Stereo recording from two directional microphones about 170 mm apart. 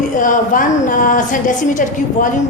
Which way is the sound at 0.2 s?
50° left (ahead or behind).